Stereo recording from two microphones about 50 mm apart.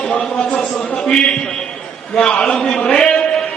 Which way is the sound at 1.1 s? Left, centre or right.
Centre.